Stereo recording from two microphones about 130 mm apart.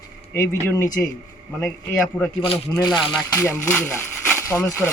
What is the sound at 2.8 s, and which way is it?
Speech, 30° left (ahead or behind).